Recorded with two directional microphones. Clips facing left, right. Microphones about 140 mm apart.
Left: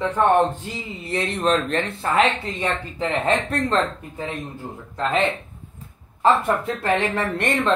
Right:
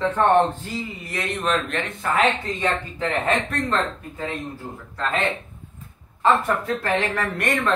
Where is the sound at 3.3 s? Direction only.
30° left (ahead or behind).